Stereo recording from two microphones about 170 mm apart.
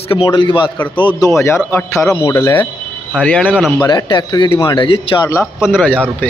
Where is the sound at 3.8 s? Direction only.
25° left (ahead or behind).